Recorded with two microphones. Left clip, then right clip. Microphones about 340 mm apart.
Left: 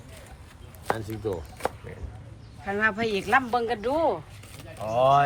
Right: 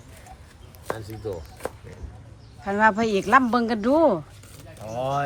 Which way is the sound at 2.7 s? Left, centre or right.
Centre.